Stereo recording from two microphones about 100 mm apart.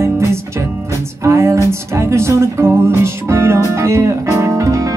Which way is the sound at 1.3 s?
30° right (ahead or behind).